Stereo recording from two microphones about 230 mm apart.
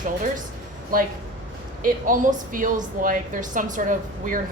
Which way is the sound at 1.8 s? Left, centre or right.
Right.